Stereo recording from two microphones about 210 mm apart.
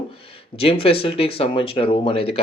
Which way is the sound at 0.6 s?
25° left (ahead or behind).